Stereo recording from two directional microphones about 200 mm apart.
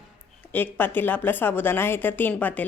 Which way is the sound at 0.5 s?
10° left (ahead or behind).